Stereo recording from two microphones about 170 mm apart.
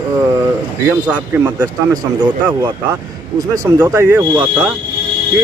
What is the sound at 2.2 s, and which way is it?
Speech, 25° right (ahead or behind).